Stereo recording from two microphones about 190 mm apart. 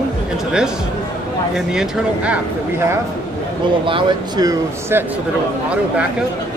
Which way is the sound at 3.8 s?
25° right (ahead or behind).